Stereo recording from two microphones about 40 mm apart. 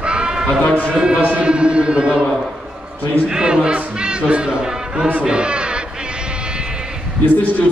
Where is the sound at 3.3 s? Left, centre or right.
Centre.